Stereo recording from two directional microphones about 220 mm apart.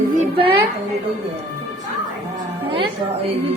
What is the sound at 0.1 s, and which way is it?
Music, 35° right (ahead or behind).